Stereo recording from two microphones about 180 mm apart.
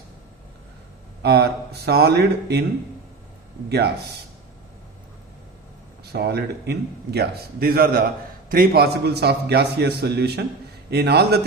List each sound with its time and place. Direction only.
1.2 s a man's voice: 65° right (ahead or behind)
3.7 s a man's voice: 65° right (ahead or behind)
6.1 s a man's voice: 65° right (ahead or behind)